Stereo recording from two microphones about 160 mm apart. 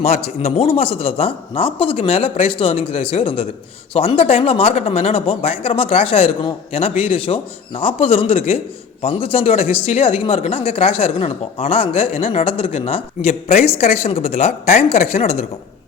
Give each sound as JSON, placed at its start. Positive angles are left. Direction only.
{"t": 0.0, "sound": "speech", "side_deg": 40}